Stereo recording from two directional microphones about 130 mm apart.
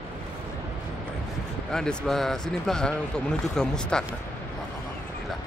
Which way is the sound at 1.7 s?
5° left (ahead or behind).